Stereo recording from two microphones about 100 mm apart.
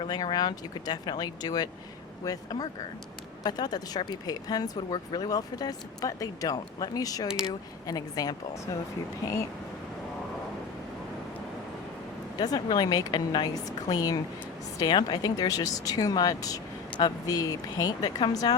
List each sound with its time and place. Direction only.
0.0 s speech: 50° left (ahead or behind)
12.4 s speech: 40° left (ahead or behind)